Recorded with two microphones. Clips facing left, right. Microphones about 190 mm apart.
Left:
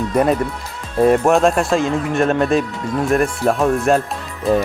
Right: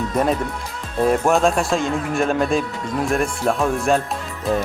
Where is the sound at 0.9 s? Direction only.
5° left (ahead or behind).